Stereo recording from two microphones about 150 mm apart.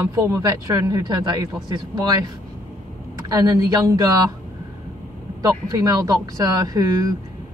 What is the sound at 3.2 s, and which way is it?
A woman's voice, 25° right (ahead or behind).